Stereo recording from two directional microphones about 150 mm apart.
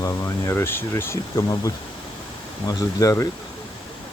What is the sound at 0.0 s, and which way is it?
Speech, 20° left (ahead or behind).